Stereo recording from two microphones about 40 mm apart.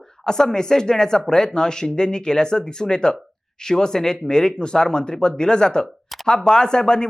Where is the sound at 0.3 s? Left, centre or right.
Centre.